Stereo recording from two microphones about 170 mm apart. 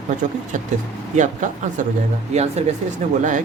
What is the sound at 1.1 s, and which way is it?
Speech, 45° right (ahead or behind).